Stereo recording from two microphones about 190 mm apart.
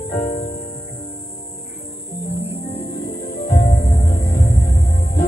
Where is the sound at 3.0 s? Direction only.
50° left (ahead or behind).